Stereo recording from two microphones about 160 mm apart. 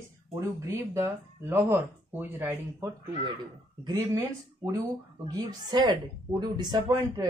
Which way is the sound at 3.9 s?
20° right (ahead or behind).